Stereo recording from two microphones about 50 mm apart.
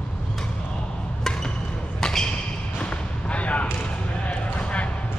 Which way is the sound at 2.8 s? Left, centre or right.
Left.